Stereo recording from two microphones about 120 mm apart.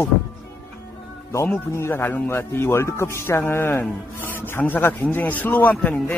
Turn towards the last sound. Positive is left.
turn(degrees=15)  # may be behind; listen again after turning